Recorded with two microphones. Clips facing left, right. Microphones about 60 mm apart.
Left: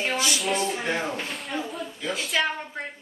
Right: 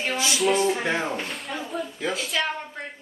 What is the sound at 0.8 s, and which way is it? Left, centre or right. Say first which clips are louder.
Speech: right 2 dB; centre.